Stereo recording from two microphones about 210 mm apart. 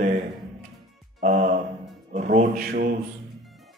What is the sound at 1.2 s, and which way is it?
A man's voice, 35° right (ahead or behind).